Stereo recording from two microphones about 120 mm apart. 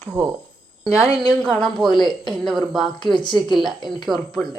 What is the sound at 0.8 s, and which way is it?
A woman's voice, 5° right (ahead or behind).